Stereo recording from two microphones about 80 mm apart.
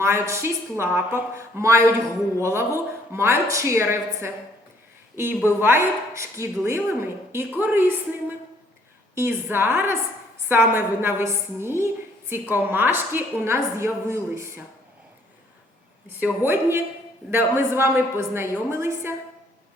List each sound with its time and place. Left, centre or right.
0.0 s a woman's voice: right
9.1 s a woman's voice: right
16.4 s a woman's voice: right